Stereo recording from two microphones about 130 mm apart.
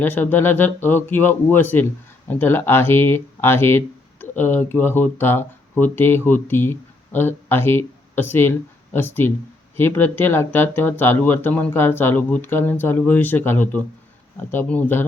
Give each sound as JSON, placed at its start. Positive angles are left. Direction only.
{"t": 0.0, "sound": "speech", "side_deg": 15}